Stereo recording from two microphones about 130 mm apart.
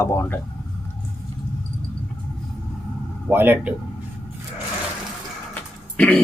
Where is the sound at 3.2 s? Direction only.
15° right (ahead or behind).